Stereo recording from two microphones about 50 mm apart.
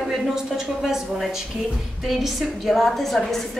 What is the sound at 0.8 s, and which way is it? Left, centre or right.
A woman's voice, centre.